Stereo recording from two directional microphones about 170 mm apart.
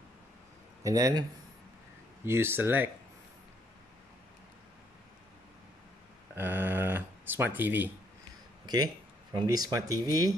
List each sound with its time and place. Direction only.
0.8 s speech: 20° right (ahead or behind)
2.2 s speech: 15° right (ahead or behind)
6.3 s a sound: 10° right (ahead or behind)
8.6 s speech: 25° right (ahead or behind)